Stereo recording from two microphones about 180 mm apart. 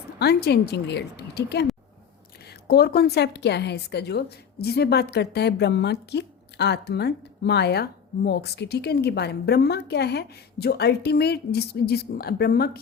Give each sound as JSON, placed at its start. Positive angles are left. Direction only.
{"t": 0.2, "sound": "a woman's voice", "side_deg": 65}